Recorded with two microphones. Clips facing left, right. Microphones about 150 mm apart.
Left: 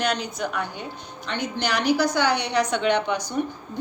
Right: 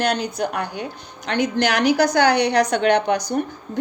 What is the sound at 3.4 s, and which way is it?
Speech, 55° right (ahead or behind).